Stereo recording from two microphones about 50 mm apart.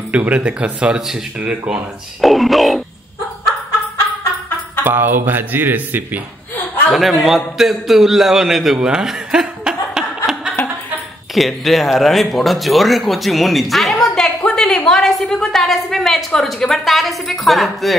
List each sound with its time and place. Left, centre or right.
0.1 s speech: right
2.2 s speech: centre
4.8 s speech: right
6.9 s speech: centre
8.7 s chuckle: centre
11.3 s speech: centre
14.5 s a sound: centre
14.9 s a woman's voice: centre